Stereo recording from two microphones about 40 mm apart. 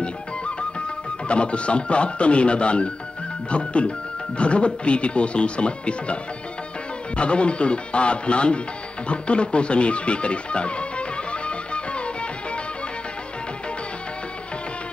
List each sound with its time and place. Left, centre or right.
0.0 s music: left
3.4 s speech: left
7.2 s speech: left
9.0 s music: left